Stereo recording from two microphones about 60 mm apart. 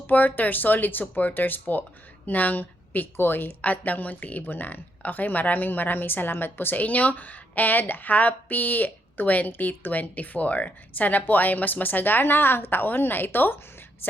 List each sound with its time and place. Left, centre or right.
0.1 s a woman's voice: left